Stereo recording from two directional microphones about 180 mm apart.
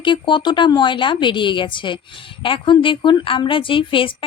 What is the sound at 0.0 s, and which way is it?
A woman's voice, 25° left (ahead or behind).